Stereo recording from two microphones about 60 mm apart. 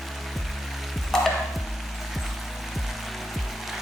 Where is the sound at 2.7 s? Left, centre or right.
Centre.